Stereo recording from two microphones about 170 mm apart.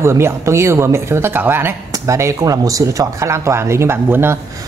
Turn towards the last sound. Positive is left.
turn(degrees=-15)  # may be behind; listen again after turning